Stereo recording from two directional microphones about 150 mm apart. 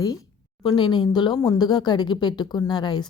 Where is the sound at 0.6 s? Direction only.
30° left (ahead or behind).